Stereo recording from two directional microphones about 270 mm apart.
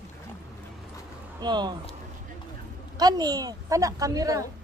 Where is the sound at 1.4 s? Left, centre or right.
Centre.